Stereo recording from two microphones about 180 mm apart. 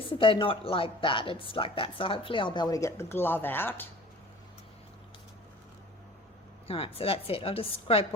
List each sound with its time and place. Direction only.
0.1 s speech: 30° left (ahead or behind); by 3.8 s 10° left (ahead or behind)
6.7 s a woman's voice: 30° left (ahead or behind)